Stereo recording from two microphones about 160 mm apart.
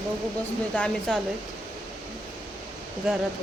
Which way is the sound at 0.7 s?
5° left (ahead or behind).